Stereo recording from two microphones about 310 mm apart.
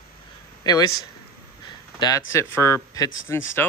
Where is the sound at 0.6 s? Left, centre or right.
Centre.